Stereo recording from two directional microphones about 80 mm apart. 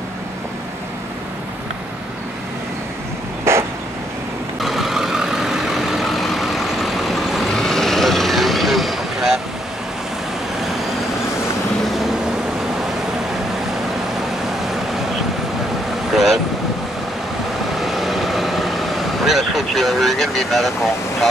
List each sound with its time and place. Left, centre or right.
3.5 s vehicle: right
4.6 s vehicle: centre
11.8 s vehicle: centre
16.1 s vehicle: centre
17.7 s vehicle: centre